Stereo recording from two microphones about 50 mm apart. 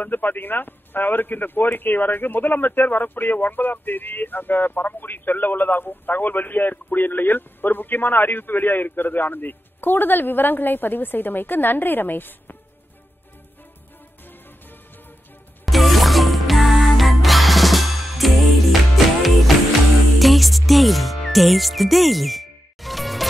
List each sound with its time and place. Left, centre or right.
0.0 s a man's voice: left
15.6 s music: centre
20.2 s music: centre